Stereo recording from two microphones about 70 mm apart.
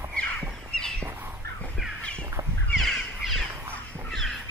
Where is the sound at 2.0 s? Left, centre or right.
Centre.